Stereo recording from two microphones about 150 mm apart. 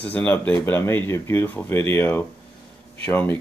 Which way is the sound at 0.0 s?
10° left (ahead or behind).